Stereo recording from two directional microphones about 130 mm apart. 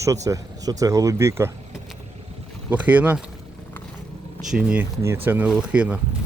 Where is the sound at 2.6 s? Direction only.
10° right (ahead or behind).